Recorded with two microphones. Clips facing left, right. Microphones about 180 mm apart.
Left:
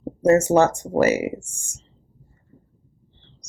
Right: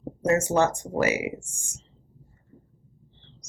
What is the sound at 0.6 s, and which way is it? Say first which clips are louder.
Speech: left 5 dB; 45° left (ahead or behind).